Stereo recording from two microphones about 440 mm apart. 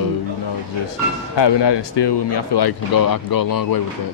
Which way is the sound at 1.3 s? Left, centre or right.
Left.